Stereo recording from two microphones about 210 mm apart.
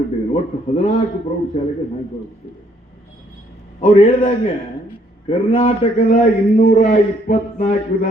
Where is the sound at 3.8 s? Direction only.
35° left (ahead or behind).